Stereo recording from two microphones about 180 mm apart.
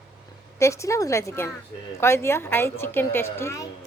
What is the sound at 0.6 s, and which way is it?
A woman's voice, 15° left (ahead or behind).